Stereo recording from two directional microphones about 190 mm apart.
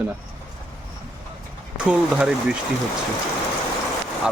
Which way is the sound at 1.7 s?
5° right (ahead or behind).